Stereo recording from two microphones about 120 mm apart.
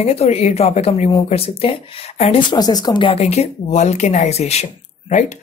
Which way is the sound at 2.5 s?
35° left (ahead or behind).